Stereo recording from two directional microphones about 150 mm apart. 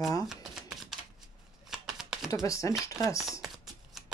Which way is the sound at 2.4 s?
20° left (ahead or behind).